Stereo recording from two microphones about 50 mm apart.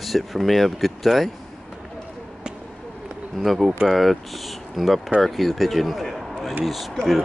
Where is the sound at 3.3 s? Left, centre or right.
Centre.